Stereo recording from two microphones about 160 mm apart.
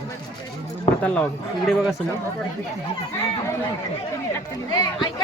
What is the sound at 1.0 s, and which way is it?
Speech, 5° left (ahead or behind).